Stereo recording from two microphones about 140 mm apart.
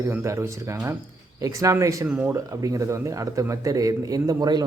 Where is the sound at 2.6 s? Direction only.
25° right (ahead or behind).